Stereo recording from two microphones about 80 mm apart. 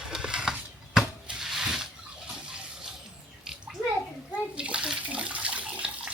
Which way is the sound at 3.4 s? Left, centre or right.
Centre.